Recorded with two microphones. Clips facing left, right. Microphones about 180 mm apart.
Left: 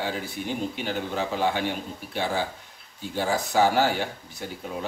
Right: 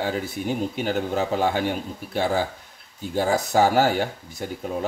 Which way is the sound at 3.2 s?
45° right (ahead or behind).